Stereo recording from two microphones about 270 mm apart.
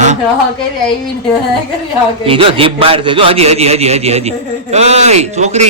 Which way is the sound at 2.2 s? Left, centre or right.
Centre.